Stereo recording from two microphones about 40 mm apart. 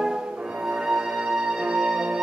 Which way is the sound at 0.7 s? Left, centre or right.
Centre.